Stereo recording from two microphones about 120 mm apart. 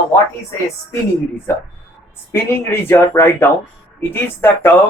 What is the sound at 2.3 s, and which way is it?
Speech, 20° left (ahead or behind).